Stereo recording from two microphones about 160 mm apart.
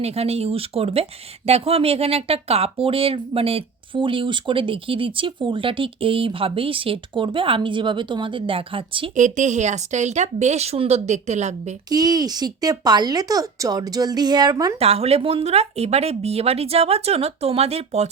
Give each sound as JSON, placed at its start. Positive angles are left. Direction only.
{"t": 0.0, "sound": "speech", "side_deg": -40}
{"t": 9.1, "sound": "speech", "side_deg": -50}
{"t": 11.9, "sound": "speech", "side_deg": -25}
{"t": 14.8, "sound": "speech", "side_deg": -40}